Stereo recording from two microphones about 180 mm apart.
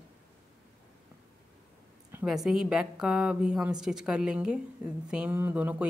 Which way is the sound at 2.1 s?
5° right (ahead or behind).